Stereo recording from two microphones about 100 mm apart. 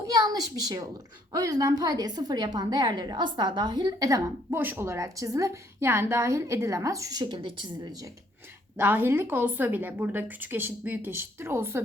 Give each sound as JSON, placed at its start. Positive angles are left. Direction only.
{"t": 0.0, "sound": "a sound", "side_deg": -40}
{"t": 1.3, "sound": "a woman's voice", "side_deg": -40}
{"t": 4.5, "sound": "a woman's voice", "side_deg": -25}
{"t": 8.8, "sound": "a woman's voice", "side_deg": -20}